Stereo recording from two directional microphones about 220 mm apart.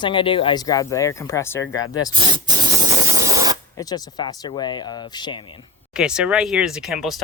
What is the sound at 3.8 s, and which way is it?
Speech, 15° left (ahead or behind).